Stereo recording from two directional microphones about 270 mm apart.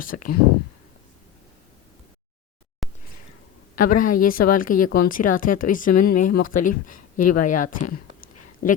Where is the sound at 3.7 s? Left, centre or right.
Left.